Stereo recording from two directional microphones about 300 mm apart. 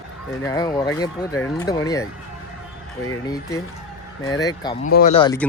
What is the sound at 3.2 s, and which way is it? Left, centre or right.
Speech, centre.